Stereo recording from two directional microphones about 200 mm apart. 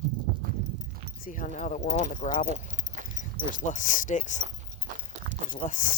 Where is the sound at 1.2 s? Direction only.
40° left (ahead or behind).